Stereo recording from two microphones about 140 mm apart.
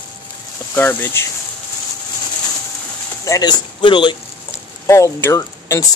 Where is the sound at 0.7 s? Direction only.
15° left (ahead or behind).